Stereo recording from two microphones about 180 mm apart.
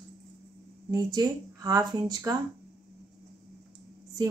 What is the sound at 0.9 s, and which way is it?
Speech, 20° right (ahead or behind).